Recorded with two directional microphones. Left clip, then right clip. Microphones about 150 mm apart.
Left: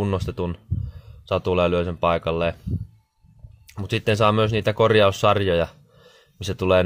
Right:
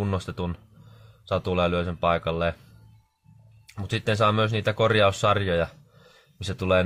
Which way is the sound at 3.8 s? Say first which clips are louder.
Left 3 dB; 35° left (ahead or behind).